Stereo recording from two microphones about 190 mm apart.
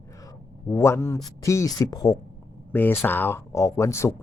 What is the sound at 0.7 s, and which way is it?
Speech, 15° left (ahead or behind).